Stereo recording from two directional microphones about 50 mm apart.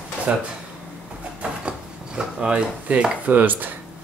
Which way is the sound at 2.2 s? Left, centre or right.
Centre.